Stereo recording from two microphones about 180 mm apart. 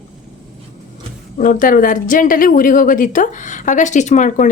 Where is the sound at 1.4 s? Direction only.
50° left (ahead or behind).